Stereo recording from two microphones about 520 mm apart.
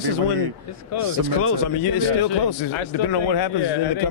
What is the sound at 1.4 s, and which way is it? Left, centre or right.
Speech, left.